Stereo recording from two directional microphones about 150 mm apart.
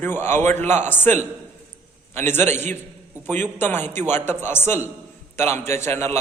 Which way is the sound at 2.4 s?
50° right (ahead or behind).